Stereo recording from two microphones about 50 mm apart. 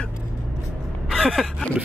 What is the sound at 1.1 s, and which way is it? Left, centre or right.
Gasp, centre.